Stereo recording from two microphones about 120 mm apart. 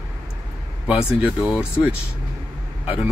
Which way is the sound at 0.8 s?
10° right (ahead or behind).